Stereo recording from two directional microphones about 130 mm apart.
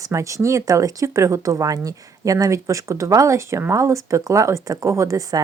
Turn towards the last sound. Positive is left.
turn(degrees=-25)  # may be behind; listen again after turning